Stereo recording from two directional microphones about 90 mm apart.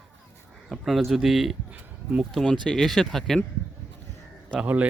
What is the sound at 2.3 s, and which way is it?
Speech, 5° left (ahead or behind).